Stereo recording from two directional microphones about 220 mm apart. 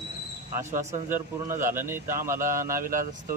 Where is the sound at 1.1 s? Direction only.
10° right (ahead or behind).